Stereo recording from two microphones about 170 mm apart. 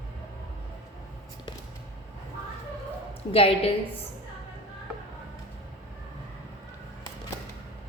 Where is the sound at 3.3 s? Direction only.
35° left (ahead or behind).